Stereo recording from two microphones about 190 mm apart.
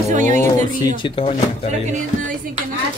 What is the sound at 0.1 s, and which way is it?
Music, 40° right (ahead or behind).